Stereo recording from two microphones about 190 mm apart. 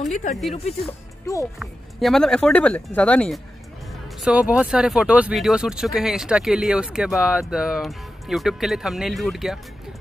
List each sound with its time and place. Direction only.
0.0 s speech: 40° left (ahead or behind)
1.6 s speech: centre (ahead or behind)
4.2 s speech: 5° right (ahead or behind)